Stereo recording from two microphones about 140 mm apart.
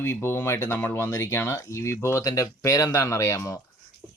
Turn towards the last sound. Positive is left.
turn(degrees=25)  # may be behind; listen again after turning